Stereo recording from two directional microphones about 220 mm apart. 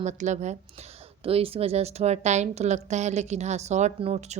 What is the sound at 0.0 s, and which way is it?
A woman's voice, 30° right (ahead or behind).